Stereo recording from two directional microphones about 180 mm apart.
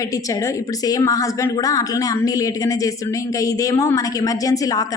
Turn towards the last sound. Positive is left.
turn(degrees=20)  # may be behind; listen again after turning